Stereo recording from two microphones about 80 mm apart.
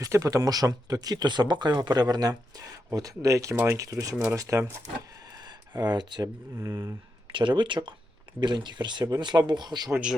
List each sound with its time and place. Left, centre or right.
0.0 s speech: right
5.5 s a sound: right
6.6 s speech: right
7.3 s speech: right